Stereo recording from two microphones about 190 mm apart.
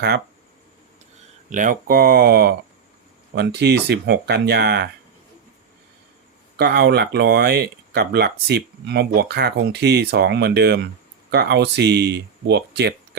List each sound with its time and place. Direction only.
1.5 s speech: 45° right (ahead or behind); by 4.9 s 60° right (ahead or behind)
6.6 s speech: 60° right (ahead or behind)